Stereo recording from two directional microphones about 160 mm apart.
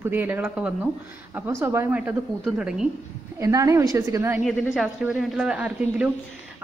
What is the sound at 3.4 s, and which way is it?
A woman's voice, 20° right (ahead or behind).